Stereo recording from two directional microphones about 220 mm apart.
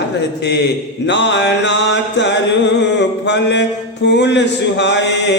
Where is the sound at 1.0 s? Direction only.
55° left (ahead or behind).